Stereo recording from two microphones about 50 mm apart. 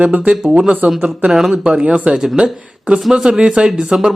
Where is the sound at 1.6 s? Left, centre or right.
Right.